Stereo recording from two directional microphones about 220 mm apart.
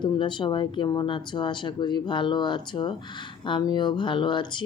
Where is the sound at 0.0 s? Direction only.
20° left (ahead or behind).